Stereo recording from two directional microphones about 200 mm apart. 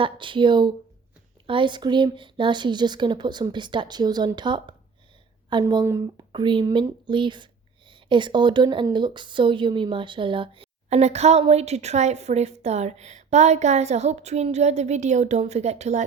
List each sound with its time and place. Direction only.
0.0 s a woman's voice: 25° right (ahead or behind)